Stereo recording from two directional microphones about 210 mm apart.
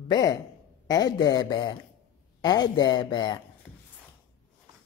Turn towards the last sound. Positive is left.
turn(degrees=20)  # may be behind; listen again after turning